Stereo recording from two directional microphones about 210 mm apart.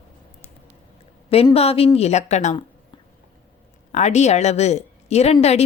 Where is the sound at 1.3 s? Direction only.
30° left (ahead or behind).